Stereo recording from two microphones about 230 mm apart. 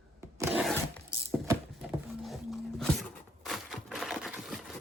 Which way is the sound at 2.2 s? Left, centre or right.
Centre.